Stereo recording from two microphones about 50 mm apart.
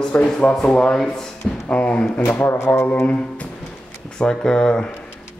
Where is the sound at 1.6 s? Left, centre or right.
Left.